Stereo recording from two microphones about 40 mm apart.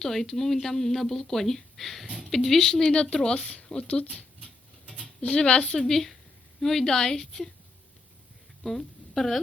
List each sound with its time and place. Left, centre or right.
0.0 s speech: centre; by 3.7 s left
5.2 s speech: left
5.8 s speech: centre
8.6 s a woman's voice: centre